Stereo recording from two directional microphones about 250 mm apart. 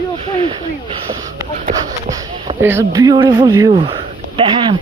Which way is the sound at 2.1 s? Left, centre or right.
Centre.